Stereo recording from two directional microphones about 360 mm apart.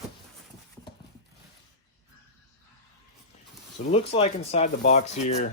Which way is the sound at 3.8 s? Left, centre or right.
Centre.